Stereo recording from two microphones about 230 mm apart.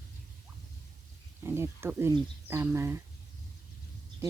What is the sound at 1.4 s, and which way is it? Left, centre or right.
Speech, centre.